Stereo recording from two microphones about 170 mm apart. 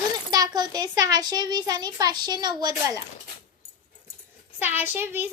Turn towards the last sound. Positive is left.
turn(degrees=-15)  # may be behind; listen again after turning